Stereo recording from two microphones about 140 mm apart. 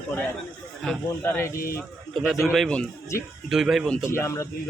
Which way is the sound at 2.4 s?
Centre (ahead or behind).